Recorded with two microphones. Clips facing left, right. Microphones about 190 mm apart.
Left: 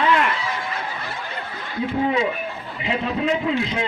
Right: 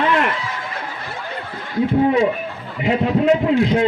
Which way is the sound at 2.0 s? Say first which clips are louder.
Right 4 dB; 50° right (ahead or behind).